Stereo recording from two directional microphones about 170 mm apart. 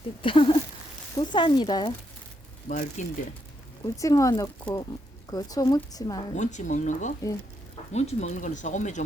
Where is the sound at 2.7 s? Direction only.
45° left (ahead or behind).